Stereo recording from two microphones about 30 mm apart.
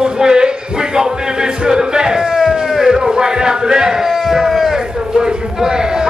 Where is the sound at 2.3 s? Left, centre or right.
Centre.